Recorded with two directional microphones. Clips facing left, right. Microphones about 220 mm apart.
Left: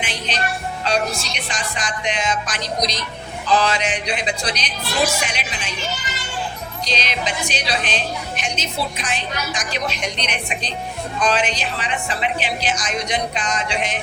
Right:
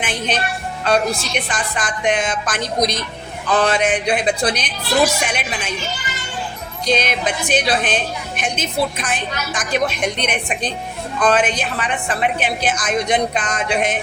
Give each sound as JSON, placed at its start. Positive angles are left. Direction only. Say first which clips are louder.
{"t": 0.0, "sound": "music", "louder": "right 5 dB", "side_deg": -50}
{"t": 0.9, "sound": "a woman's voice", "louder": "right 5 dB", "side_deg": -55}
{"t": 6.8, "sound": "a woman's voice", "louder": "right 7 dB", "side_deg": -50}